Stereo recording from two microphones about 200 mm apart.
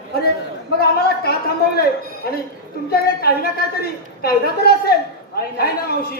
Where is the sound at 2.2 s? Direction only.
50° left (ahead or behind).